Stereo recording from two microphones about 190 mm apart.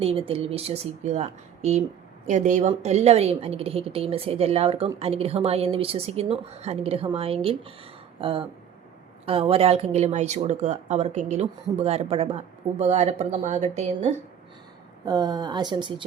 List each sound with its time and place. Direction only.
0.0 s speech: 30° right (ahead or behind)
15.0 s speech: 20° right (ahead or behind)